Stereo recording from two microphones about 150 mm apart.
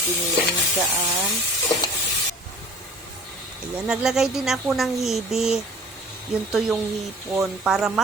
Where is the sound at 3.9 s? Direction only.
5° right (ahead or behind).